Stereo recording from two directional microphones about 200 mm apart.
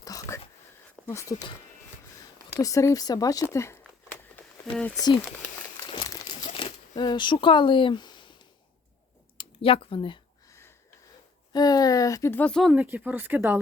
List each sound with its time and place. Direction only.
0.0 s a sound: 15° left (ahead or behind)
1.0 s speech: 15° left (ahead or behind)
2.6 s speech: 15° left (ahead or behind)
4.4 s a sound: 5° left (ahead or behind)
4.9 s speech: 20° left (ahead or behind)
5.8 s crumpling: 20° left (ahead or behind)
9.4 s speech: 30° left (ahead or behind)
10.5 s a sound: 10° left (ahead or behind)
11.5 s speech: 20° left (ahead or behind)
12.7 s speech: 5° right (ahead or behind)